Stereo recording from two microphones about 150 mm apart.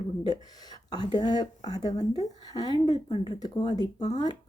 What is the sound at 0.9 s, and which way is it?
A woman's voice, 30° left (ahead or behind).